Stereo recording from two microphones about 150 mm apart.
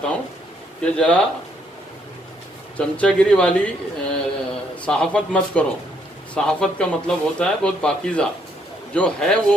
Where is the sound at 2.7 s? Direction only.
5° left (ahead or behind).